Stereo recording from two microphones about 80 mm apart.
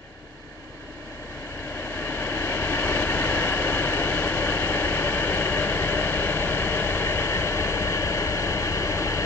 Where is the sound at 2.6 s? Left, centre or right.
Left.